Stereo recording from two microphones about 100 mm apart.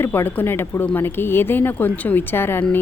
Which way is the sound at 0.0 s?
20° left (ahead or behind).